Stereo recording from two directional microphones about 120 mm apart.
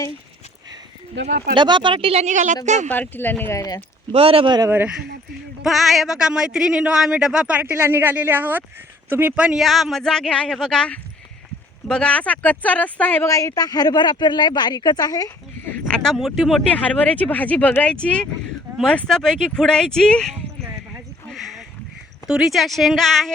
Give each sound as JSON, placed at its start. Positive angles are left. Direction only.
{"t": 1.5, "sound": "speech", "side_deg": -40}
{"t": 2.2, "sound": "a woman's voice", "side_deg": -90}
{"t": 2.9, "sound": "speech", "side_deg": 15}
{"t": 4.1, "sound": "speech", "side_deg": -50}
{"t": 5.6, "sound": "speech", "side_deg": 0}
{"t": 13.3, "sound": "speech", "side_deg": 30}
{"t": 15.6, "sound": "speech", "side_deg": 10}
{"t": 21.2, "sound": "a sound", "side_deg": 0}
{"t": 22.3, "sound": "speech", "side_deg": -5}